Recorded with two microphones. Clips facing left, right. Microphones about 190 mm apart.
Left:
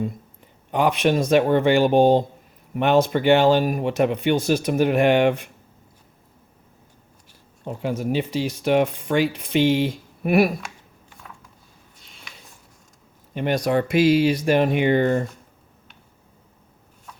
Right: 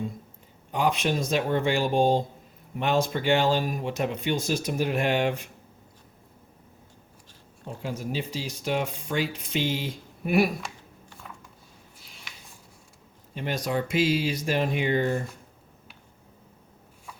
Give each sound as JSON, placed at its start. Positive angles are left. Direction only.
{"t": 0.7, "sound": "speech", "side_deg": 65}
{"t": 7.6, "sound": "speech", "side_deg": 65}
{"t": 11.9, "sound": "a sound", "side_deg": 0}
{"t": 13.3, "sound": "speech", "side_deg": 65}